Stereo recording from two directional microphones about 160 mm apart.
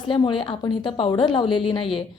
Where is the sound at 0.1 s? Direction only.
30° left (ahead or behind).